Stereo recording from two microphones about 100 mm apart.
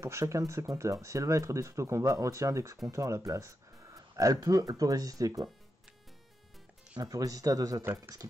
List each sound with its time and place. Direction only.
0.0 s speech: 30° right (ahead or behind)
7.0 s speech: 35° right (ahead or behind)